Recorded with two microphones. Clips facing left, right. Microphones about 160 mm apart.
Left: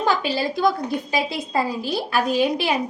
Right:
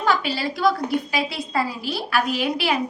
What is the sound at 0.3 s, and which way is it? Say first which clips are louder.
A woman's voice: left 1 dB; 20° left (ahead or behind).